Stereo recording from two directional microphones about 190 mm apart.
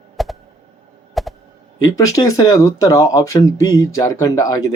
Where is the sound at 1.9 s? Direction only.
20° left (ahead or behind).